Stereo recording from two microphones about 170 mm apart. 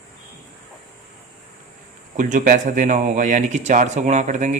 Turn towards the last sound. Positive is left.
turn(degrees=-45)  # may be behind; listen again after turning